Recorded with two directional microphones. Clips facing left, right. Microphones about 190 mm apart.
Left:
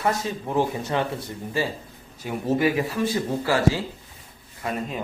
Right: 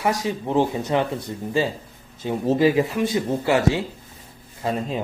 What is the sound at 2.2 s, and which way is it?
Speech, 25° right (ahead or behind).